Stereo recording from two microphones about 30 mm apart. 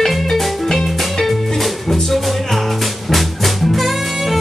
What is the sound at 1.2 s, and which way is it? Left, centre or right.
Music, centre.